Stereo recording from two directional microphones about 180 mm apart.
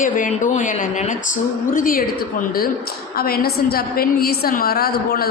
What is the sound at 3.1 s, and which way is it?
A woman's voice, 55° left (ahead or behind).